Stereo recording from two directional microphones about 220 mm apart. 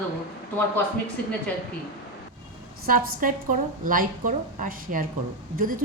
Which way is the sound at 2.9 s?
40° right (ahead or behind).